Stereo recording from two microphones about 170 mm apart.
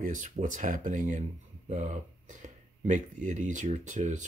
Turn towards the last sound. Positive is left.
turn(degrees=-45)  # may be behind; listen again after turning